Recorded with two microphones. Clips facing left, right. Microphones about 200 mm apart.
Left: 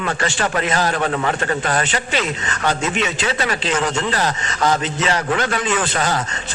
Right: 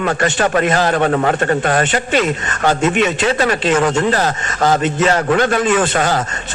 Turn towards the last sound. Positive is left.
turn(degrees=-45)  # may be behind; listen again after turning